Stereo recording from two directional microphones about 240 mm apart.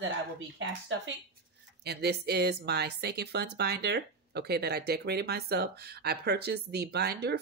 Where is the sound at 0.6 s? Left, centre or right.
Right.